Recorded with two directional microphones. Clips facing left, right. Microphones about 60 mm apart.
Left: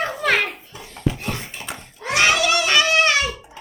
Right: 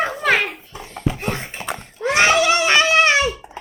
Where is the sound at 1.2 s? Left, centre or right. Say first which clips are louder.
Right 4 dB; right.